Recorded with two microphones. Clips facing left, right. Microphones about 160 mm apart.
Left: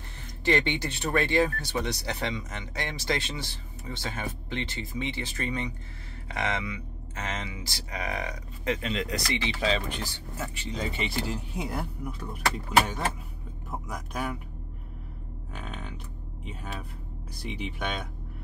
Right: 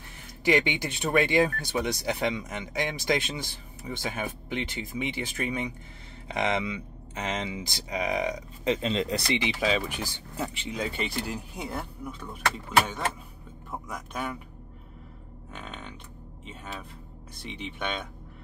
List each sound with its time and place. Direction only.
0.5 s speech: 10° right (ahead or behind); by 9.4 s 30° right (ahead or behind)
9.4 s speech: 10° right (ahead or behind)
10.8 s speech: centre (ahead or behind)
15.5 s a sound: 5° left (ahead or behind)
17.5 s speech: 5° left (ahead or behind)